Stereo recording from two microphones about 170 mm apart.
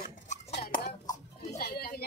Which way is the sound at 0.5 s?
65° left (ahead or behind).